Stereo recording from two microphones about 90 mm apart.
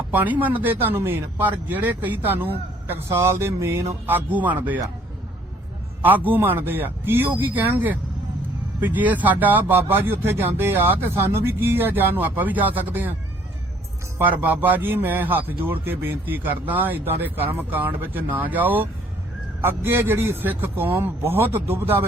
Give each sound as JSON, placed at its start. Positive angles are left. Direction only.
{"t": 0.1, "sound": "speech", "side_deg": -20}
{"t": 6.0, "sound": "speech", "side_deg": -20}
{"t": 14.2, "sound": "speech", "side_deg": -20}